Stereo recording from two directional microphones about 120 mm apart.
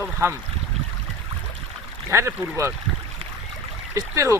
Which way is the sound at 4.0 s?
25° right (ahead or behind).